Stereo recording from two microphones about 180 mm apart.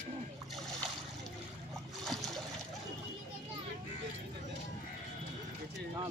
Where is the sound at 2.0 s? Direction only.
Centre (ahead or behind).